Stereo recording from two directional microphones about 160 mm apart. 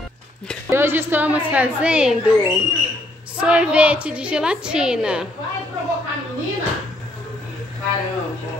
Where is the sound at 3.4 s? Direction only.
5° right (ahead or behind).